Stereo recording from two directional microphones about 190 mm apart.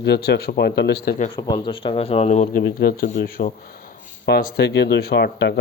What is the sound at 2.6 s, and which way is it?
Speech, 55° left (ahead or behind).